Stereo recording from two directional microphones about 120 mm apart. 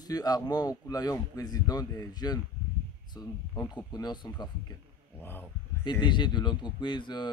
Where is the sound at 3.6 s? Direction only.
35° left (ahead or behind).